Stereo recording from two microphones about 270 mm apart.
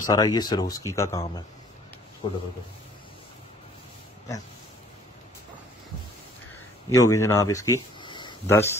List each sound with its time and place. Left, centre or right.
0.0 s speech: centre
2.2 s a man's voice: centre
6.9 s speech: centre